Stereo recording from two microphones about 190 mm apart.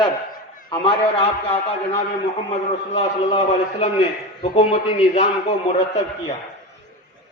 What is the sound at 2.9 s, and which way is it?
A man's voice, 35° left (ahead or behind).